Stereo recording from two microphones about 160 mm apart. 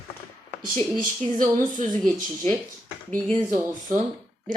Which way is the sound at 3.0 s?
10° left (ahead or behind).